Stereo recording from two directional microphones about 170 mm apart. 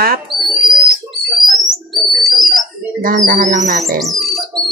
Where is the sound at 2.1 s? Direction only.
Centre (ahead or behind).